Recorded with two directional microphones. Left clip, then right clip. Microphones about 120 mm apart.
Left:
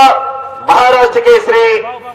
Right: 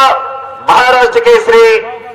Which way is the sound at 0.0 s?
40° right (ahead or behind).